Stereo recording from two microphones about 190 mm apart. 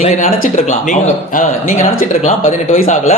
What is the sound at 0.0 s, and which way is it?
A man's voice, 35° left (ahead or behind).